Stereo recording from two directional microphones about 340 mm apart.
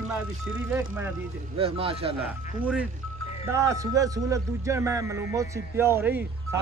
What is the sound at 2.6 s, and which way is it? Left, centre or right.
Speech, centre.